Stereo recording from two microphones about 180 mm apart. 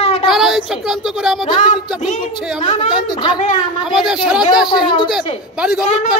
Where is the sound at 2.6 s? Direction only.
40° left (ahead or behind).